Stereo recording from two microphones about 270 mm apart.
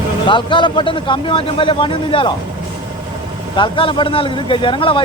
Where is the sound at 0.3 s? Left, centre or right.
Centre.